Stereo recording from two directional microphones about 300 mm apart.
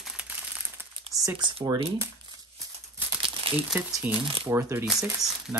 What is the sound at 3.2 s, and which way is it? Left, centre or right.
Crumpling, centre.